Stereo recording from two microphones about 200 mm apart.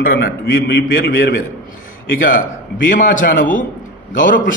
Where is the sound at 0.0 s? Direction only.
50° left (ahead or behind).